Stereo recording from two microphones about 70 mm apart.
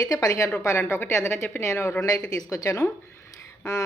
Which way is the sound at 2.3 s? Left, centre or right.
Left.